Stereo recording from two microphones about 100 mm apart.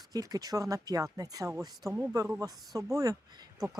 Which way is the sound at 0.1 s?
40° right (ahead or behind).